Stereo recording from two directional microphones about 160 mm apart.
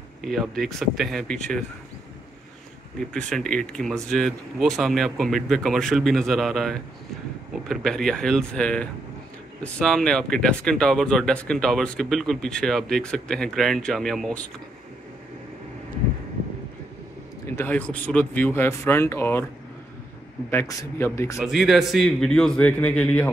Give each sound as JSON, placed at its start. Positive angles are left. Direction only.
{"t": 0.2, "sound": "speech", "side_deg": 0}
{"t": 3.1, "sound": "speech", "side_deg": 5}
{"t": 17.6, "sound": "speech", "side_deg": 10}
{"t": 20.4, "sound": "speech", "side_deg": 15}
{"t": 21.4, "sound": "speech", "side_deg": -5}